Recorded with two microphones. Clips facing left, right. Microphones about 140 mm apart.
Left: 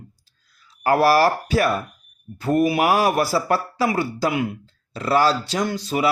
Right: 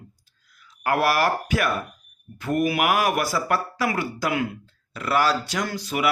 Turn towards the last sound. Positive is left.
turn(degrees=30)  # may be behind; listen again after turning